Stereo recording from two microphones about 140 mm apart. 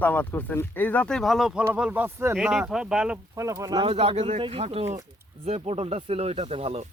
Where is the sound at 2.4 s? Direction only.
Centre (ahead or behind).